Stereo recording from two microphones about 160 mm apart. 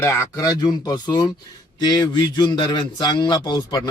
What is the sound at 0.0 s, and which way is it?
Speech, 20° left (ahead or behind).